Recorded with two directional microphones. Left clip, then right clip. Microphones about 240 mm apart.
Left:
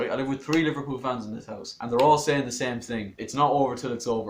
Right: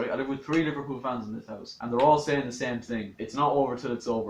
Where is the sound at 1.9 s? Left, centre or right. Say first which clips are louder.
Left 2 dB; left.